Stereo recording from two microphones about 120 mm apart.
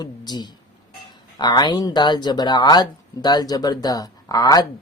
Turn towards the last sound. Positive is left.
turn(degrees=35)  # may be behind; listen again after turning